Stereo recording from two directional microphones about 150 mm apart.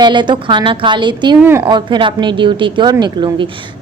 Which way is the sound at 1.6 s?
30° right (ahead or behind).